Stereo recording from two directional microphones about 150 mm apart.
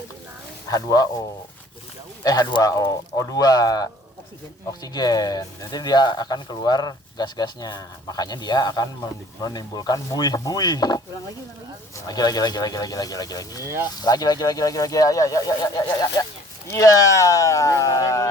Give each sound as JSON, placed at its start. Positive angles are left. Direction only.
{"t": 0.7, "sound": "speech", "side_deg": 25}
{"t": 2.2, "sound": "speech", "side_deg": 25}